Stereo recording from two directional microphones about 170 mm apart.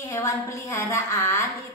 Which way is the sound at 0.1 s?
15° left (ahead or behind).